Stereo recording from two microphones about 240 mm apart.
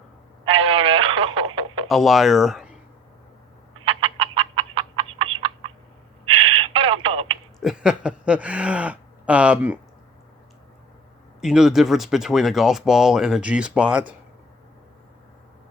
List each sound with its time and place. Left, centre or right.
0.4 s radio: right
1.9 s speech: centre
3.8 s frog: right
6.2 s a sound: right
7.6 s speech: centre
11.3 s speech: centre